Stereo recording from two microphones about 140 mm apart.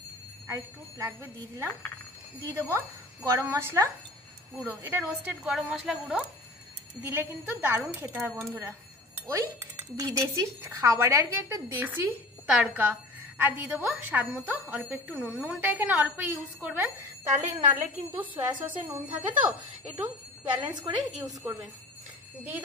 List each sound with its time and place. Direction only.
0.5 s a woman's voice: 20° right (ahead or behind)
17.3 s speech: 55° right (ahead or behind)
17.7 s speech: 10° right (ahead or behind)
20.7 s a woman's voice: 30° right (ahead or behind)